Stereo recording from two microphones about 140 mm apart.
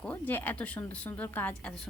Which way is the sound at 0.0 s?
15° left (ahead or behind).